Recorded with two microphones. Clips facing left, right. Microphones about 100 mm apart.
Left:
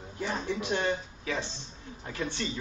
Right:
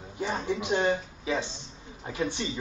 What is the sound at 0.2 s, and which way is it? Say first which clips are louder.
Speech: right 2 dB; 15° right (ahead or behind).